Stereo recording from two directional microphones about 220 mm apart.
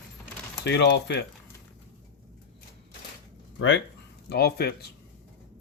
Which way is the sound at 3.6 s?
55° left (ahead or behind).